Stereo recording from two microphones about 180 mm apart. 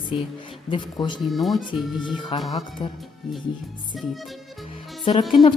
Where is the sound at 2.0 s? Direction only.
25° left (ahead or behind).